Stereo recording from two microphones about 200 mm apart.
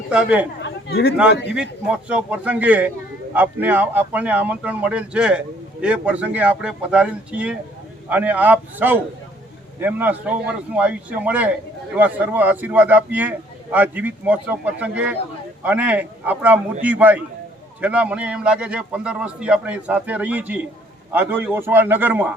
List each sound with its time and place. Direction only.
0.1 s speech: 5° right (ahead or behind)
0.6 s chatter: 50° left (ahead or behind)
1.5 s a man's voice: 5° right (ahead or behind)